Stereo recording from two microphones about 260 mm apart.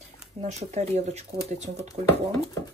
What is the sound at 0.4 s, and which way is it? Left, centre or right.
Speech, right.